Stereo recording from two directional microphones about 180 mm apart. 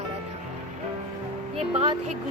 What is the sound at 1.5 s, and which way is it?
Speech, 30° right (ahead or behind).